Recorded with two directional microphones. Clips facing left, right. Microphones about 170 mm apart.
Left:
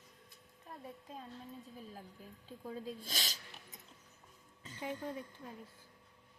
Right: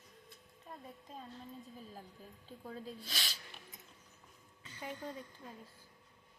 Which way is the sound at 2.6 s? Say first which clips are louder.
Left 3 dB; 10° left (ahead or behind).